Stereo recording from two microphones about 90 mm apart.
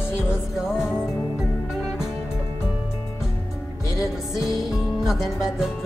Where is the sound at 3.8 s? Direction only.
35° left (ahead or behind).